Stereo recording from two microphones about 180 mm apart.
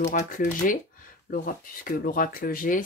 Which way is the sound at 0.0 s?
45° left (ahead or behind).